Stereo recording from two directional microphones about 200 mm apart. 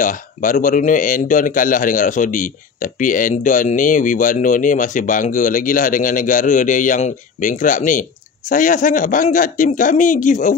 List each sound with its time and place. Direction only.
0.0 s a man's voice: 40° left (ahead or behind)